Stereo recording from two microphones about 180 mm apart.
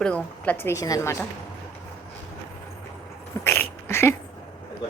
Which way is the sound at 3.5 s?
10° left (ahead or behind).